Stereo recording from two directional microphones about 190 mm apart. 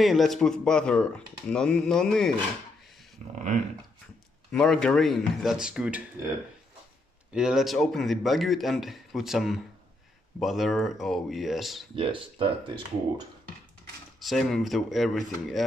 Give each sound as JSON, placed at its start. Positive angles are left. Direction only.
{"t": 0.0, "sound": "speech", "side_deg": 0}
{"t": 4.5, "sound": "speech", "side_deg": 5}
{"t": 7.3, "sound": "speech", "side_deg": -5}
{"t": 11.9, "sound": "speech", "side_deg": -30}
{"t": 14.2, "sound": "speech", "side_deg": 0}